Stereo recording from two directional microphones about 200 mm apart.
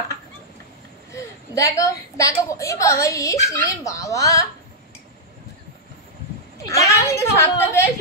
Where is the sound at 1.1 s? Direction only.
15° left (ahead or behind).